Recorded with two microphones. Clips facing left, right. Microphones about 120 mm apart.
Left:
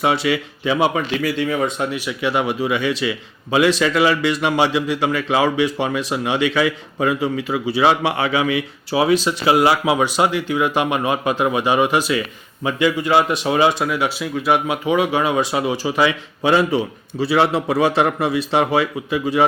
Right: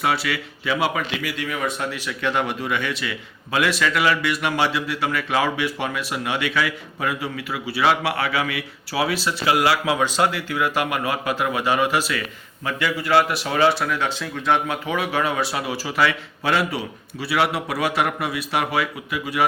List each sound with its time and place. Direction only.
0.0 s speech: 20° left (ahead or behind)